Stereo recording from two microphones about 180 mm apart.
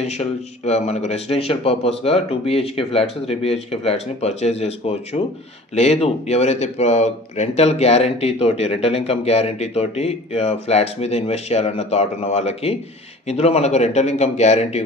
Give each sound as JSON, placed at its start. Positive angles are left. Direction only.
{"t": 0.0, "sound": "speech", "side_deg": 35}